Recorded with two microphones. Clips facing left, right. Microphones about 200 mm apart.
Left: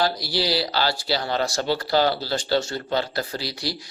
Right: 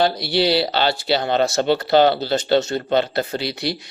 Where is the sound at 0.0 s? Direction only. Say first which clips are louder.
Right 6 dB; 25° right (ahead or behind).